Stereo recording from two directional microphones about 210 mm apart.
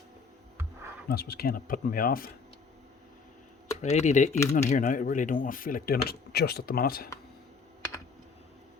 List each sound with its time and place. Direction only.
1.0 s speech: 45° left (ahead or behind)
3.8 s speech: 35° left (ahead or behind)